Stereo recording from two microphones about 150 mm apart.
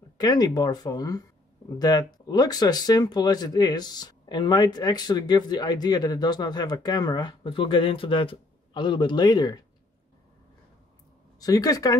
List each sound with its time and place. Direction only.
0.2 s speech: 25° left (ahead or behind)
11.3 s speech: 25° left (ahead or behind)